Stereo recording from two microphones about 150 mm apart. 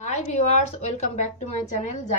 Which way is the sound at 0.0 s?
50° left (ahead or behind).